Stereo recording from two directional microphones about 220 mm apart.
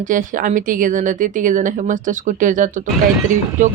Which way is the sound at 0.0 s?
35° right (ahead or behind).